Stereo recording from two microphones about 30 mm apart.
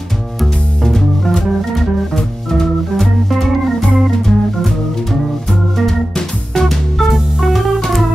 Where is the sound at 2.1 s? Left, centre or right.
Centre.